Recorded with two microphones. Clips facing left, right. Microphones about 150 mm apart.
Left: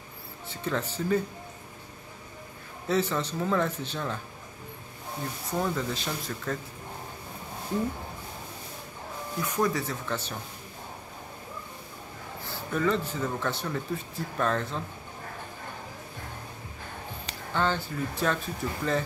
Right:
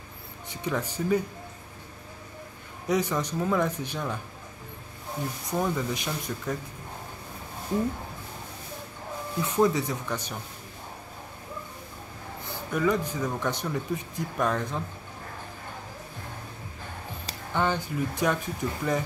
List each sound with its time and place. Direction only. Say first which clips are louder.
0.5 s speech: right 1 dB; 15° right (ahead or behind)
2.9 s speech: right 1 dB; 15° right (ahead or behind)
5.6 s speech: right 1 dB; 10° right (ahead or behind)
9.4 s speech: right 4 dB; 20° right (ahead or behind)
12.4 s speech: right 1 dB; 10° right (ahead or behind)
17.6 s speech: right 1 dB; 15° right (ahead or behind)